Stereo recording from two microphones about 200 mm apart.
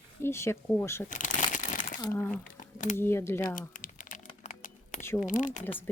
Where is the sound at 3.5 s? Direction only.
45° left (ahead or behind).